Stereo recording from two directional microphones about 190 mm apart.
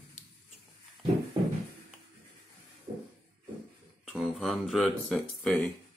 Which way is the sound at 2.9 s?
45° right (ahead or behind).